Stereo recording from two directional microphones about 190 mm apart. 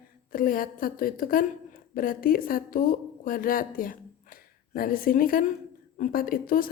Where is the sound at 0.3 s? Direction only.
50° left (ahead or behind).